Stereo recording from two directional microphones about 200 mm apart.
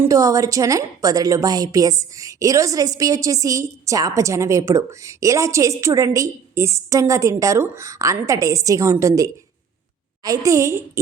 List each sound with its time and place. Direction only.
0.0 s a woman's voice: 15° right (ahead or behind)